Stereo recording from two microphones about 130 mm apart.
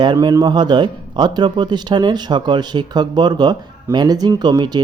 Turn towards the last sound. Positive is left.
turn(degrees=-35)  # may be behind; listen again after turning